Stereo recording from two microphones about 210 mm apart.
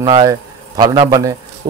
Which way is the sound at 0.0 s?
20° right (ahead or behind).